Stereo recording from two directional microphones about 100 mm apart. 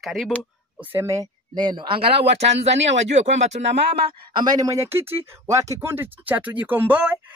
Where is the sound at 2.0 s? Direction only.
70° right (ahead or behind).